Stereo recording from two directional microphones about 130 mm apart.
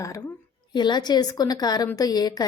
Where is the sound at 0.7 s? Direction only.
35° left (ahead or behind).